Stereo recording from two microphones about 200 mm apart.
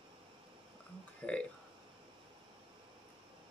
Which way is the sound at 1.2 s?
5° left (ahead or behind).